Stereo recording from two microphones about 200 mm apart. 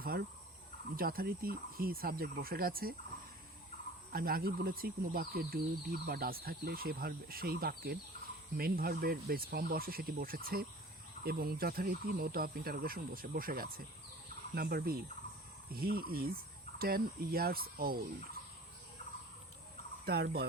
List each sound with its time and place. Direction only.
0.0 s speech: 50° right (ahead or behind)
4.1 s speech: 45° right (ahead or behind)
20.1 s speech: 55° right (ahead or behind)